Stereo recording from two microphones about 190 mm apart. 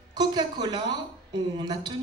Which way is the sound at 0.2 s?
20° right (ahead or behind).